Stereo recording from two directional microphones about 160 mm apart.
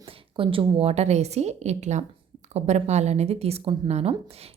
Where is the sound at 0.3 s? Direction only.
35° right (ahead or behind).